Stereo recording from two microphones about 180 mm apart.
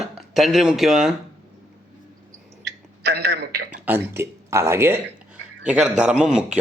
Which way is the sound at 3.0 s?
65° right (ahead or behind).